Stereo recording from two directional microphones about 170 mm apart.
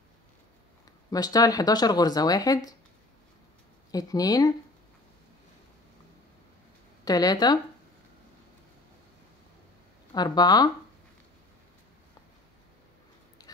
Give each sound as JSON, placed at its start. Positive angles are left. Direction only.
{"t": 1.1, "sound": "speech", "side_deg": 20}
{"t": 3.9, "sound": "speech", "side_deg": 20}
{"t": 7.1, "sound": "speech", "side_deg": 20}
{"t": 10.1, "sound": "speech", "side_deg": 25}